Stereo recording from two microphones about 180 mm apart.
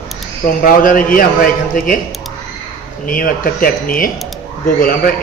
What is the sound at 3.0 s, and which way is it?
A man's voice, 50° left (ahead or behind).